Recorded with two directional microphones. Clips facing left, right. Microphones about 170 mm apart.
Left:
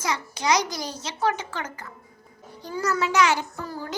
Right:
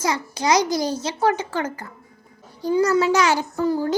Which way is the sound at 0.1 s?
30° right (ahead or behind).